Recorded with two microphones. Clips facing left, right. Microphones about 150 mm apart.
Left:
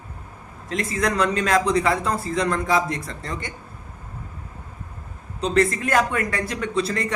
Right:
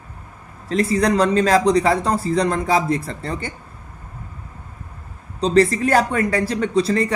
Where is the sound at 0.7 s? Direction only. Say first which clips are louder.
Right 6 dB; 35° right (ahead or behind).